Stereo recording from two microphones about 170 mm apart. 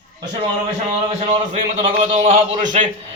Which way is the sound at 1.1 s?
40° right (ahead or behind).